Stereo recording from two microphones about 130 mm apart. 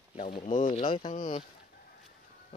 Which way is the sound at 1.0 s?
90° left.